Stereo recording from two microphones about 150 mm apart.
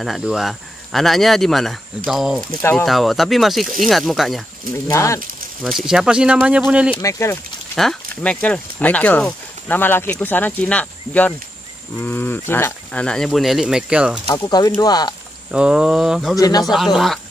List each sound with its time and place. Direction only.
0.0 s speech: centre (ahead or behind)
4.8 s speech: 20° left (ahead or behind)
5.6 s speech: centre (ahead or behind)
7.0 s speech: 20° left (ahead or behind)
7.7 s speech: 5° left (ahead or behind)
14.2 s speech: 25° left (ahead or behind)
15.5 s speech: 5° right (ahead or behind)
16.3 s speech: 25° left (ahead or behind)
16.7 s speech: centre (ahead or behind)